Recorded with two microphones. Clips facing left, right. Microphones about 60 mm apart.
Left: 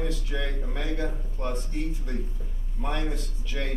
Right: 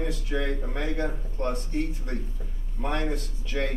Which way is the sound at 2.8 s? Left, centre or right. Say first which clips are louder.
Right 2 dB; centre.